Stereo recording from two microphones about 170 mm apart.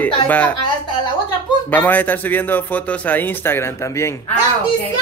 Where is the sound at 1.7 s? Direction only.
10° left (ahead or behind).